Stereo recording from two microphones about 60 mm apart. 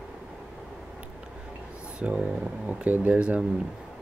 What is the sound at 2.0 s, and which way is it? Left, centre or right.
Speech, centre.